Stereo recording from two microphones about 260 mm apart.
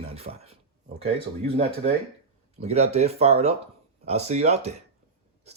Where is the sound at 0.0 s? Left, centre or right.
Right.